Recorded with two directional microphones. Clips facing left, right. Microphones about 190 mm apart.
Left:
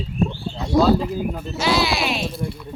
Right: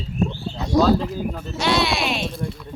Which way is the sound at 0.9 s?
5° left (ahead or behind).